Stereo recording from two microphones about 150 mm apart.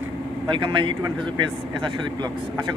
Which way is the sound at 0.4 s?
35° right (ahead or behind).